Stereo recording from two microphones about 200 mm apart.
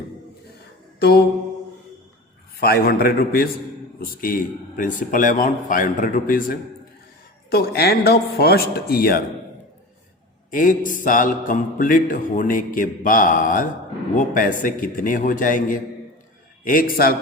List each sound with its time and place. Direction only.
0.9 s mantra: 50° left (ahead or behind)
2.6 s speech: 50° left (ahead or behind)
10.5 s a man's voice: 40° left (ahead or behind)